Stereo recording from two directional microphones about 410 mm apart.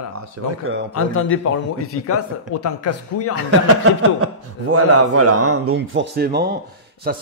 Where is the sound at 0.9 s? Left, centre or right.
Left.